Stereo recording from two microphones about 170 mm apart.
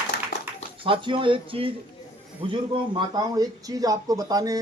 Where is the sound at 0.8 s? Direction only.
30° right (ahead or behind).